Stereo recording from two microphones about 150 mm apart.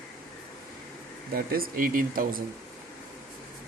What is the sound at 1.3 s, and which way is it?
Speech, 80° right.